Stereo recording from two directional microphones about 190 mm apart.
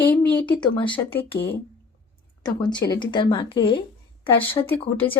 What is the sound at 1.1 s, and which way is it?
Speech, 10° left (ahead or behind).